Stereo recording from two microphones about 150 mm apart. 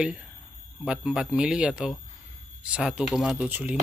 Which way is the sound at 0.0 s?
5° right (ahead or behind).